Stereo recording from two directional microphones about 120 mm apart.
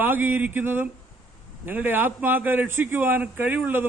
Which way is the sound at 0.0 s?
15° right (ahead or behind).